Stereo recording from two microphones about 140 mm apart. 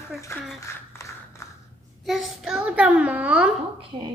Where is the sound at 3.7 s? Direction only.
35° right (ahead or behind).